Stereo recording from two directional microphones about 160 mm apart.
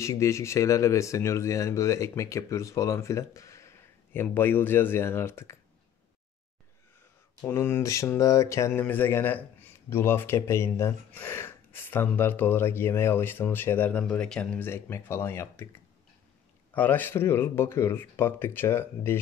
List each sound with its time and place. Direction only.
0.0 s speech: 20° left (ahead or behind)
7.4 s speech: 15° left (ahead or behind)
16.7 s speech: 10° left (ahead or behind)